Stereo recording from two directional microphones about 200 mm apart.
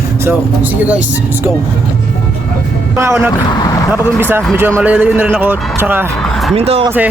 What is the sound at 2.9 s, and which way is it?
Speech, 10° right (ahead or behind).